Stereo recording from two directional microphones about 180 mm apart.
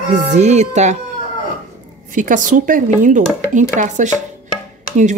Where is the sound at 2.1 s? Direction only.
45° right (ahead or behind).